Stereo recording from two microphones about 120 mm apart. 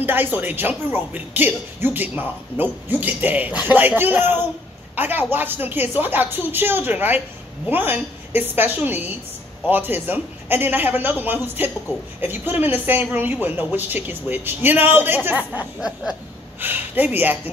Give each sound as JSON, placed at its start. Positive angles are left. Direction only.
{"t": 0.0, "sound": "speech", "side_deg": -15}
{"t": 15.8, "sound": "a sound", "side_deg": -5}
{"t": 16.5, "sound": "speech", "side_deg": -15}